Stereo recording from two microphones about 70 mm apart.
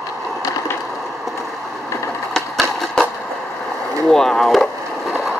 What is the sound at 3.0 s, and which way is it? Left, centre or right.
Skateboard, centre.